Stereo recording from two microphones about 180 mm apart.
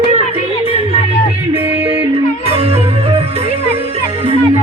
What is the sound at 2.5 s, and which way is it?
Music, 35° right (ahead or behind).